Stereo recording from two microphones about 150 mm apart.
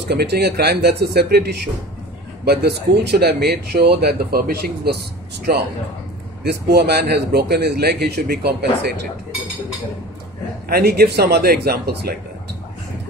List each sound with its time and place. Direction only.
0.1 s speech: 90° right
6.4 s speech: 90° right
10.7 s speech: 90° right